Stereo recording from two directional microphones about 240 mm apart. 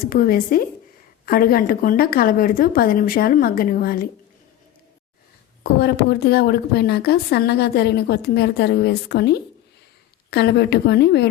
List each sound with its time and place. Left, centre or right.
0.1 s a woman's voice: left
5.8 s a woman's voice: left